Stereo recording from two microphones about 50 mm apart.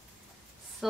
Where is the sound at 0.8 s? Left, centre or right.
Centre.